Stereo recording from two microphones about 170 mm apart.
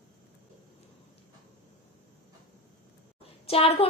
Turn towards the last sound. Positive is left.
turn(degrees=35)  # may be behind; listen again after turning